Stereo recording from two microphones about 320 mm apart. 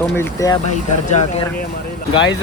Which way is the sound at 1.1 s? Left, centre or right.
Left.